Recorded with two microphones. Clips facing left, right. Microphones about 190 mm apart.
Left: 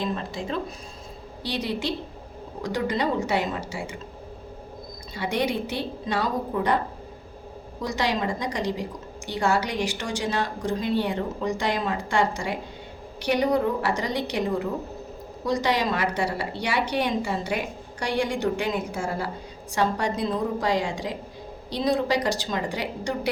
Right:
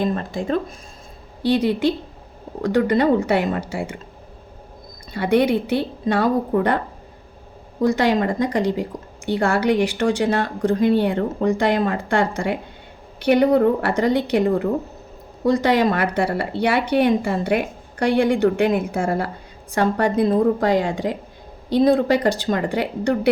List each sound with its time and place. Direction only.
0.0 s a woman's voice: 50° right (ahead or behind)
5.1 s a woman's voice: 60° right (ahead or behind)
7.8 s a woman's voice: 55° right (ahead or behind)